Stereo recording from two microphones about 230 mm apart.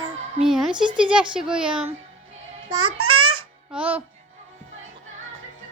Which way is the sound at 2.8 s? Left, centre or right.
Right.